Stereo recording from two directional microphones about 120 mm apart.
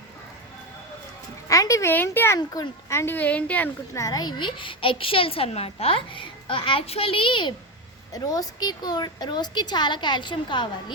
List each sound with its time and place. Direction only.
1.5 s a woman's voice: 25° left (ahead or behind)
3.9 s a woman's voice: 30° left (ahead or behind)
8.1 s a woman's voice: 30° left (ahead or behind)